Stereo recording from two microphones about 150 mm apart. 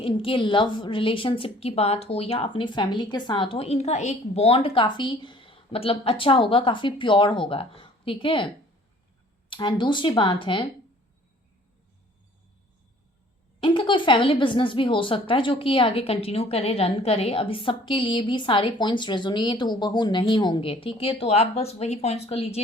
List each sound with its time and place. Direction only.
0.0 s speech: 35° left (ahead or behind)
9.5 s speech: 30° left (ahead or behind)
13.6 s speech: 30° left (ahead or behind)